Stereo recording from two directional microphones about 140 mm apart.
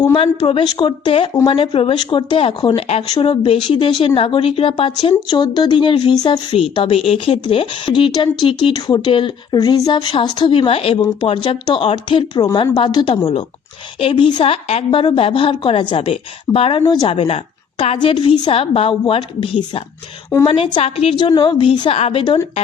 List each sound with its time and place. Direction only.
0.2 s speech: 40° left (ahead or behind)